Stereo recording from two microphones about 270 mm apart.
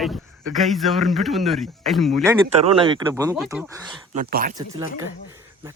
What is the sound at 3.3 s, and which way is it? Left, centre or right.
Speech, centre.